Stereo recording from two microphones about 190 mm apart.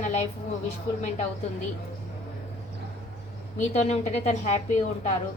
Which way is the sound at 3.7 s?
35° left (ahead or behind).